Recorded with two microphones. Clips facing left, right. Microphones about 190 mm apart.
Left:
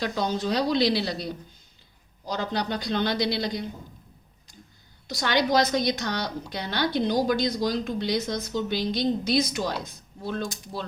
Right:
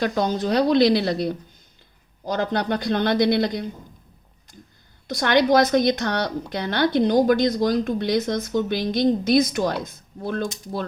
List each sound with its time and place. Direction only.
0.0 s a woman's voice: 50° right (ahead or behind)
5.0 s a woman's voice: 50° right (ahead or behind)